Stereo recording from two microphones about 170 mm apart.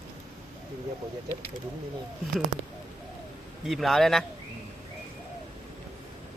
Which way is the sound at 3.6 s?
Centre (ahead or behind).